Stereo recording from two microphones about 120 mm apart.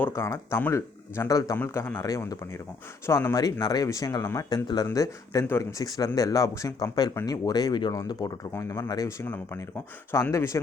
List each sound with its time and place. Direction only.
0.0 s speech: 20° left (ahead or behind)
8.5 s speech: 25° left (ahead or behind)